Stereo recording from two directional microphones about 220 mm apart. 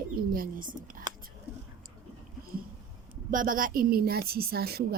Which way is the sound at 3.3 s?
40° right (ahead or behind).